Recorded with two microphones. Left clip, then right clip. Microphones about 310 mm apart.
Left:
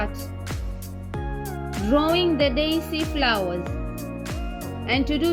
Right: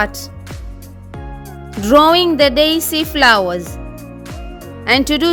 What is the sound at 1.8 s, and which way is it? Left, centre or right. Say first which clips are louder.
Speech: right 12 dB; right.